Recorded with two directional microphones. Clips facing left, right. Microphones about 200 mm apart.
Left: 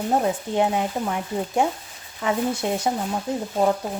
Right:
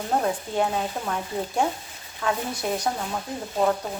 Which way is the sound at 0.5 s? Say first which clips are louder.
Left 3 dB; 20° left (ahead or behind).